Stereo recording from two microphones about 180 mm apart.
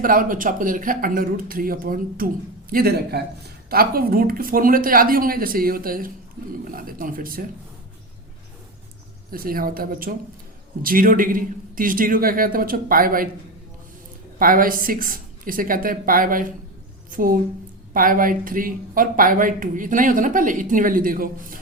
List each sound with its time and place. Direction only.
0.0 s speech: 50° right (ahead or behind)
9.3 s speech: 55° right (ahead or behind)
14.3 s a woman's voice: 50° right (ahead or behind)